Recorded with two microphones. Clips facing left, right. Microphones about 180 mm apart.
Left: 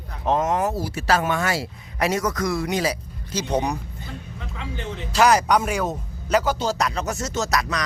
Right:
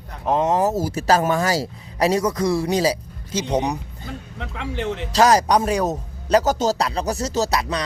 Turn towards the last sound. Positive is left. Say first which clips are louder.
# right 3 dB
turn(degrees=-30)  # may be behind; listen again after turning